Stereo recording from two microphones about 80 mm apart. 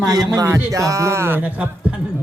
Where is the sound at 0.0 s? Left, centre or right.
Right.